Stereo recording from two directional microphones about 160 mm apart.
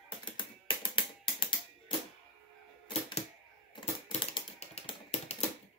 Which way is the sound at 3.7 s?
40° left (ahead or behind).